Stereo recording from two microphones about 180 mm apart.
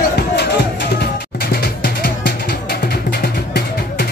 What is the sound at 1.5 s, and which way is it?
Music, 65° left (ahead or behind).